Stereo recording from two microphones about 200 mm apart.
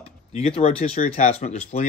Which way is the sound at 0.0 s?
30° left (ahead or behind).